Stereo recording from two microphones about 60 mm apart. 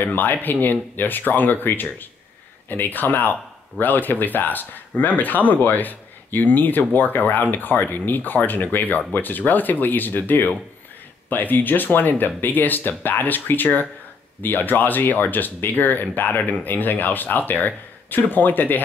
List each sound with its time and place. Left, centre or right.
0.0 s speech: left